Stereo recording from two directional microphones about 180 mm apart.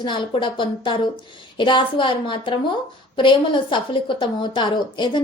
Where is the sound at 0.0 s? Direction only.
25° left (ahead or behind).